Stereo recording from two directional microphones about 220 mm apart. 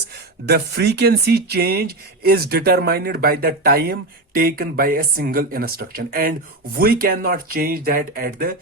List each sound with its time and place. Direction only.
0.4 s speech: 50° right (ahead or behind)